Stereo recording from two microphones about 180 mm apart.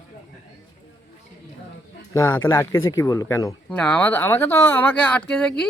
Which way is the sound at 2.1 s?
15° left (ahead or behind).